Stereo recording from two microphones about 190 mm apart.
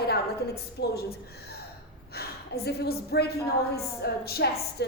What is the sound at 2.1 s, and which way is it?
A woman's voice, 55° left (ahead or behind).